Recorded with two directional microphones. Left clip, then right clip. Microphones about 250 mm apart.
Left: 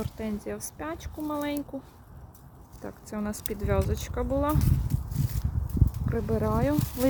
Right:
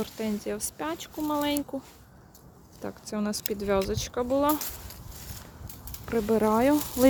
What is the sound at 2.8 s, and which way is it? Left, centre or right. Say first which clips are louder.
Speech: right 3 dB; centre.